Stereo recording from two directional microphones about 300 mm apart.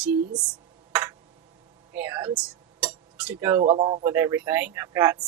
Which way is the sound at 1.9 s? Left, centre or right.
Centre.